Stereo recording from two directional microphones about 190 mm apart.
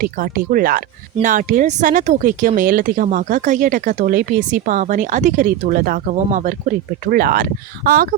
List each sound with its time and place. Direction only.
0.0 s speech: 45° right (ahead or behind)